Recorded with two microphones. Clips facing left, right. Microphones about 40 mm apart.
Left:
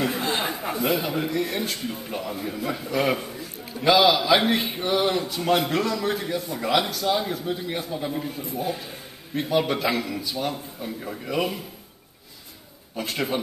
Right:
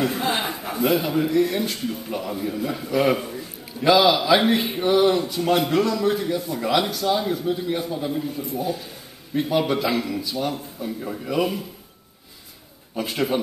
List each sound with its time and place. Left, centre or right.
0.2 s a sound: centre
0.7 s speech: centre
8.4 s speech: left
9.3 s speech: centre
12.9 s speech: centre